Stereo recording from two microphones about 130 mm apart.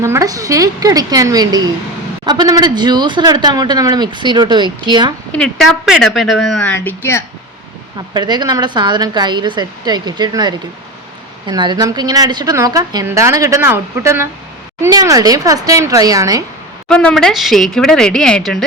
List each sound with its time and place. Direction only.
0.0 s a woman's voice: 25° right (ahead or behind)
5.3 s speech: 5° left (ahead or behind)
6.7 s speech: 15° left (ahead or behind)
8.1 s a woman's voice: 35° right (ahead or behind)
16.9 s speech: 10° left (ahead or behind)